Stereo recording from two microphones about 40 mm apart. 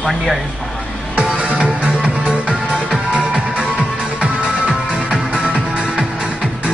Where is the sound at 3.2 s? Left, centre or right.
Right.